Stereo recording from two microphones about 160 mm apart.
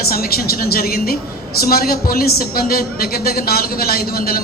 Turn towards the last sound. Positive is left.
turn(degrees=70)  # may be behind; listen again after turning